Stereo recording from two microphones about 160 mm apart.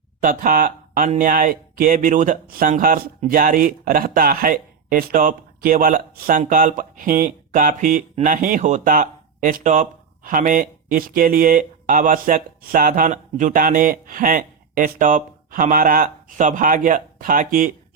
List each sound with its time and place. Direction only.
0.2 s speech: 60° right (ahead or behind)